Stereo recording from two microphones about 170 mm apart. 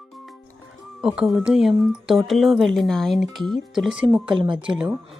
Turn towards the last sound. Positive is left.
turn(degrees=-5)  # may be behind; listen again after turning